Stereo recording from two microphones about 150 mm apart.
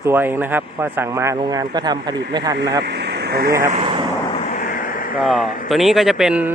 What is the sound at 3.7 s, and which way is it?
Vehicle, 40° right (ahead or behind).